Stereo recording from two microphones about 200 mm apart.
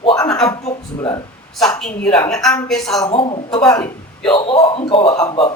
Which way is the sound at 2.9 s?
25° left (ahead or behind).